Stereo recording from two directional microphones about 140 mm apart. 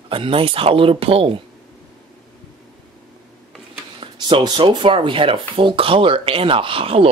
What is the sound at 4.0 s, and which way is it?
Speech, 35° right (ahead or behind).